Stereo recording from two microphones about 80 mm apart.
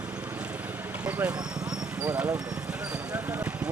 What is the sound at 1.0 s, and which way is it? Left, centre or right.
Speech, centre.